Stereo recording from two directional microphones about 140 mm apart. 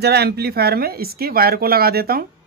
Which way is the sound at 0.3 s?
90° right.